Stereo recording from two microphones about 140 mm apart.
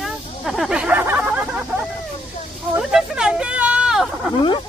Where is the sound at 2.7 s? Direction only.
5° right (ahead or behind).